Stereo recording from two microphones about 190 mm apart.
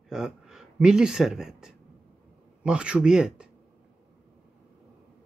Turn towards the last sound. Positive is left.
turn(degrees=-5)  # may be behind; listen again after turning